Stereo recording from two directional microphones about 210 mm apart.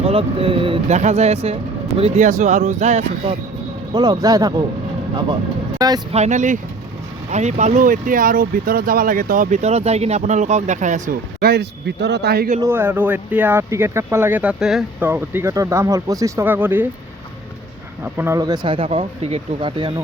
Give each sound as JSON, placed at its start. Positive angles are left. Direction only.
{"t": 0.0, "sound": "speech", "side_deg": -25}
{"t": 3.9, "sound": "speech", "side_deg": -20}
{"t": 5.8, "sound": "speech", "side_deg": -20}
{"t": 6.1, "sound": "speech", "side_deg": -35}
{"t": 12.6, "sound": "speech", "side_deg": -10}
{"t": 18.0, "sound": "speech", "side_deg": -10}